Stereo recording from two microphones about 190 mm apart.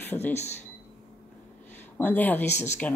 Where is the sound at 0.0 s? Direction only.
10° left (ahead or behind).